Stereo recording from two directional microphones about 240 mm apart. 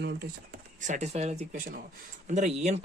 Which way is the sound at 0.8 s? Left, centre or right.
Right.